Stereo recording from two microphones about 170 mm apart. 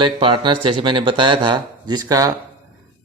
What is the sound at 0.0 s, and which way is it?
A man's voice, 30° right (ahead or behind).